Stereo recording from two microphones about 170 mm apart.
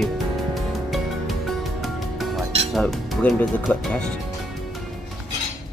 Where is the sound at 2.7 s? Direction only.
Centre (ahead or behind).